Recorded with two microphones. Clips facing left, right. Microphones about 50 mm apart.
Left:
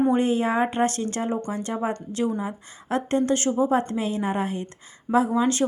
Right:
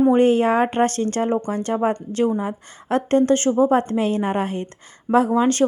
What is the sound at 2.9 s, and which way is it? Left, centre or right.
Speech, right.